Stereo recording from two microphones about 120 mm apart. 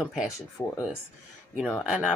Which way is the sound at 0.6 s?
15° left (ahead or behind).